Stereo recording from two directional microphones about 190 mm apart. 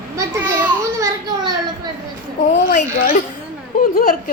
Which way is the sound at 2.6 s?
45° left (ahead or behind).